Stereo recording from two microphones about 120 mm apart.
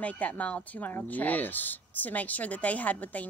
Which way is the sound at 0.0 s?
10° left (ahead or behind).